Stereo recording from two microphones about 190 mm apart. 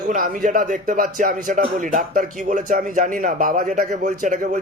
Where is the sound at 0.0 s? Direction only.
45° right (ahead or behind).